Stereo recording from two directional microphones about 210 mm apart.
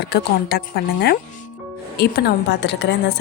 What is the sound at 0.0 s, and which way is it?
A woman's voice, 50° left (ahead or behind).